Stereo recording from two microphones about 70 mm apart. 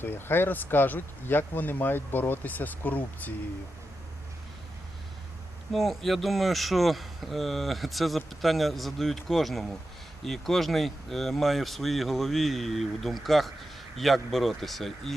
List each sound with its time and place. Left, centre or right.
0.0 s speech: left
5.7 s speech: centre